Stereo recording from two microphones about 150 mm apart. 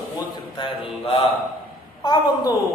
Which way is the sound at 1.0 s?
35° left (ahead or behind).